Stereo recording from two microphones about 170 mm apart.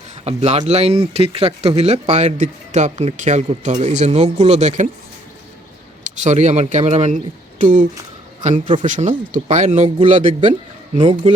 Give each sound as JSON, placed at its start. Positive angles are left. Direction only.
{"t": 0.3, "sound": "speech", "side_deg": -40}
{"t": 6.0, "sound": "a man's voice", "side_deg": -45}
{"t": 10.9, "sound": "speech", "side_deg": -30}